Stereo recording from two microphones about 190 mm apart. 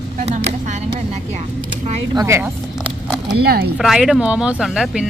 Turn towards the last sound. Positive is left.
turn(degrees=0)  # may be behind; listen again after turning